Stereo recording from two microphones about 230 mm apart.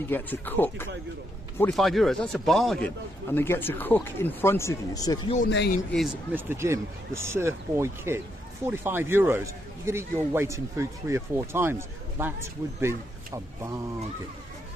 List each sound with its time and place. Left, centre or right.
0.1 s speech: centre
5.5 s speech: left
6.3 s speech: centre